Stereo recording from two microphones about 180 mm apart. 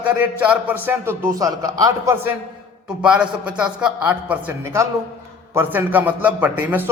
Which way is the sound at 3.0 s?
5° right (ahead or behind).